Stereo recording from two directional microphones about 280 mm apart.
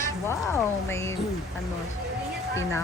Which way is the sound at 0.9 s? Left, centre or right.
Centre.